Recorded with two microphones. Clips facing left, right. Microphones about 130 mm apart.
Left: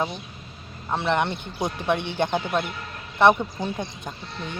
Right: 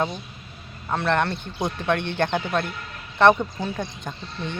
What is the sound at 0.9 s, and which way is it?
Speech, 15° left (ahead or behind).